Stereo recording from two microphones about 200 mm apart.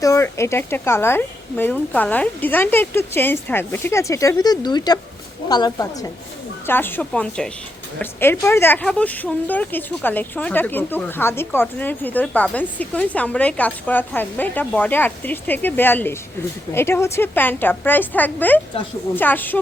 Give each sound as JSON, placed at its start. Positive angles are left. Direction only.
{"t": 0.0, "sound": "a woman's voice", "side_deg": 15}